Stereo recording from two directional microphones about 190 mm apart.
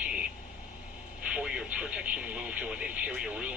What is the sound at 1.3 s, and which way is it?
Vehicle, 5° right (ahead or behind).